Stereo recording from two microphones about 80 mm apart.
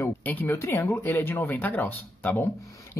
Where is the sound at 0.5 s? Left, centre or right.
Left.